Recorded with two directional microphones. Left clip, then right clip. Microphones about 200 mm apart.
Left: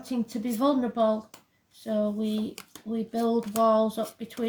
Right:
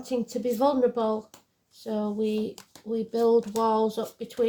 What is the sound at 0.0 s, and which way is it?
Speech, 30° right (ahead or behind).